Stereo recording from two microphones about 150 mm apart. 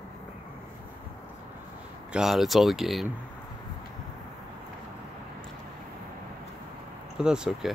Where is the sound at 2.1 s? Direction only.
Centre (ahead or behind).